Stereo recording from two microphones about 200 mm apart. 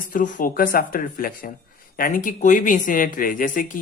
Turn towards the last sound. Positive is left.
turn(degrees=40)  # may be behind; listen again after turning